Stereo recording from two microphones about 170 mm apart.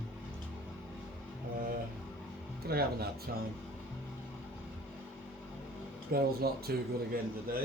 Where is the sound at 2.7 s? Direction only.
65° right (ahead or behind).